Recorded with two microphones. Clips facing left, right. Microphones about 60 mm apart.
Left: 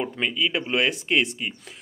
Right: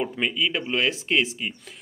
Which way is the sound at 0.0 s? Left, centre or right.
Centre.